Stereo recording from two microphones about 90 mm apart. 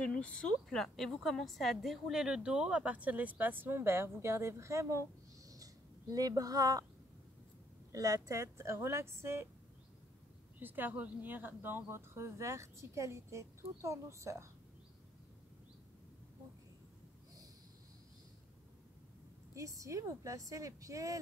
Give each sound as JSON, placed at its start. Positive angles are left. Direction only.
{"t": 0.0, "sound": "a woman's voice", "side_deg": 10}
{"t": 5.5, "sound": "a sound", "side_deg": -40}
{"t": 7.9, "sound": "speech", "side_deg": -40}
{"t": 10.6, "sound": "speech", "side_deg": -20}
{"t": 19.5, "sound": "speech", "side_deg": -35}